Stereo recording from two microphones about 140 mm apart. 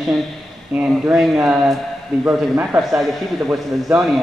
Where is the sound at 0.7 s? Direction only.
5° right (ahead or behind).